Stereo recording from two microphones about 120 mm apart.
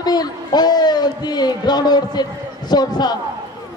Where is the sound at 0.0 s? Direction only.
35° left (ahead or behind).